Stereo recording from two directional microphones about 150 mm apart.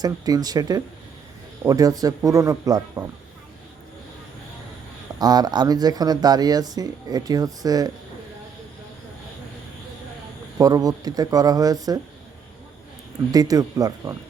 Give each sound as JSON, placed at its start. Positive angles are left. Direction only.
{"t": 0.0, "sound": "speech", "side_deg": -25}
{"t": 5.2, "sound": "speech", "side_deg": -25}
{"t": 10.6, "sound": "speech", "side_deg": -25}
{"t": 13.3, "sound": "speech", "side_deg": -25}